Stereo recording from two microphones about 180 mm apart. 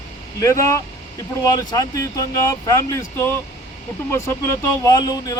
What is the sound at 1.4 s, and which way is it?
A man's voice, 20° left (ahead or behind).